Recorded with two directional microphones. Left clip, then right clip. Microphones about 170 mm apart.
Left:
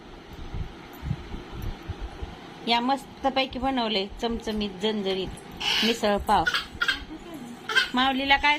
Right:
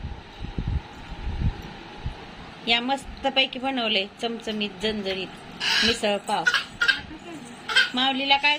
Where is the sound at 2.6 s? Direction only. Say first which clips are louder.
Right 1 dB; 5° left (ahead or behind).